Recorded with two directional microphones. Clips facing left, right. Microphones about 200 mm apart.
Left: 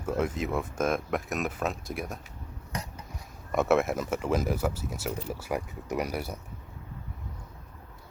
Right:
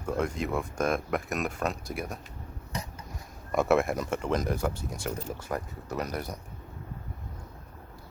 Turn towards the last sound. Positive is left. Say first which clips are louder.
# left 2 dB
turn(degrees=10)  # may be behind; listen again after turning